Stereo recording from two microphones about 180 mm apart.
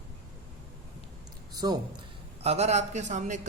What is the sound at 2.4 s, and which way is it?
A man's voice, 35° right (ahead or behind).